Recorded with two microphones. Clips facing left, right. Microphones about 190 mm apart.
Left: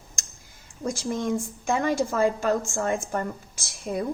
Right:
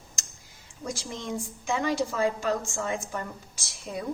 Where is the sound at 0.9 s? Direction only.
50° left (ahead or behind).